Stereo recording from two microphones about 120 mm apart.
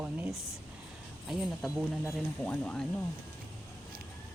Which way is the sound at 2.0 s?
10° left (ahead or behind).